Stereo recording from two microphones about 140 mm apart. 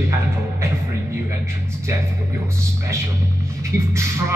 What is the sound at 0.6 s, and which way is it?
Music, 20° right (ahead or behind).